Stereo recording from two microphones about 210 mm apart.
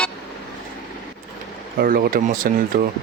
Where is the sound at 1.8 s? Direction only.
45° right (ahead or behind).